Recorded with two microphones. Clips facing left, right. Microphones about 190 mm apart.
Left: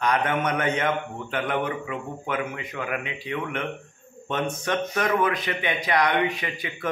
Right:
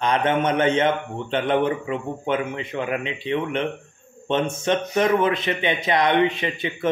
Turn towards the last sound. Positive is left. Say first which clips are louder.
# right 6 dB
turn(degrees=-25)  # may be behind; listen again after turning